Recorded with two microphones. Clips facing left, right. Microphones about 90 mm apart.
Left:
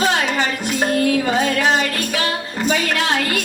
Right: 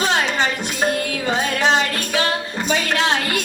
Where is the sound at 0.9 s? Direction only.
35° left (ahead or behind).